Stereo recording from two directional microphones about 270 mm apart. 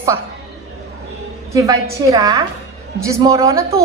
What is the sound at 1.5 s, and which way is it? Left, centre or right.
A woman's voice, centre.